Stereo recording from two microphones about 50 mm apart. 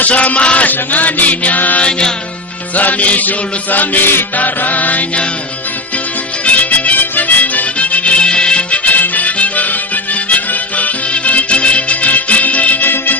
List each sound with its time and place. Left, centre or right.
0.0 s chant: left
1.8 s music: centre
2.7 s chant: left
6.4 s music: left